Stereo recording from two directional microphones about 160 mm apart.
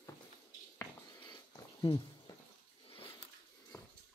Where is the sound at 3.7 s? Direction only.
20° left (ahead or behind).